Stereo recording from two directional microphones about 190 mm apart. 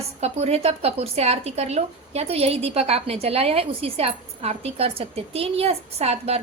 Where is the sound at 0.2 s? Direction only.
35° right (ahead or behind).